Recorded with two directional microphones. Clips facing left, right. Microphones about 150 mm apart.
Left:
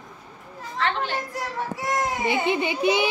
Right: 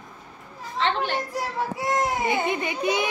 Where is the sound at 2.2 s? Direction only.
25° left (ahead or behind).